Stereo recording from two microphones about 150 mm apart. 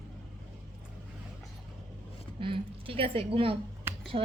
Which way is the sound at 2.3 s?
35° right (ahead or behind).